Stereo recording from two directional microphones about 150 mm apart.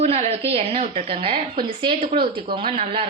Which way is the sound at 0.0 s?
45° right (ahead or behind).